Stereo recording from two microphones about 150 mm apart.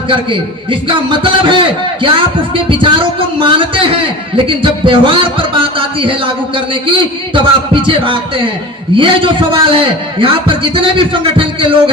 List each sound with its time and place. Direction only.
0.1 s a man's voice: 35° right (ahead or behind)
7.3 s a man's voice: 35° right (ahead or behind)